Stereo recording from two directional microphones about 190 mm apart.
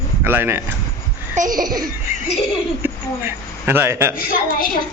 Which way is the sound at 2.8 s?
10° right (ahead or behind).